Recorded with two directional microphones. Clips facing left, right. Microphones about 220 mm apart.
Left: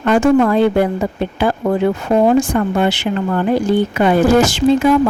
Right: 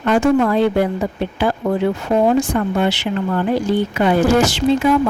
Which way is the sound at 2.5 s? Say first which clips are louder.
Left 2 dB; 50° left (ahead or behind).